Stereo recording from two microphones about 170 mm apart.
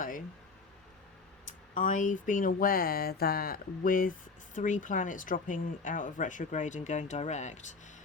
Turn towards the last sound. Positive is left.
turn(degrees=45)  # may be behind; listen again after turning